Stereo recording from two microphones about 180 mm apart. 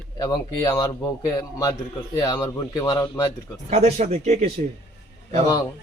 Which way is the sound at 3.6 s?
40° right (ahead or behind).